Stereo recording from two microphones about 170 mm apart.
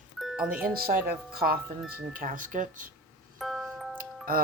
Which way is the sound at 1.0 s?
65° right (ahead or behind).